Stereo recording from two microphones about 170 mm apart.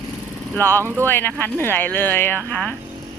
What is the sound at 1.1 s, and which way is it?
Speech, 10° left (ahead or behind).